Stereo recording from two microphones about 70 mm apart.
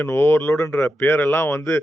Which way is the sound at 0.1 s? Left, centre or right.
Left.